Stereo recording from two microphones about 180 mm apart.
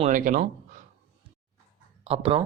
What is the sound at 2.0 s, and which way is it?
Speech, 35° right (ahead or behind).